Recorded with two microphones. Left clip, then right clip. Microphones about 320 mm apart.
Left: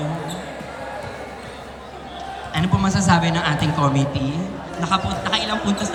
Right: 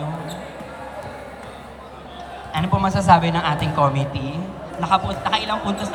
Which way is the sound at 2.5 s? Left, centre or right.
Centre.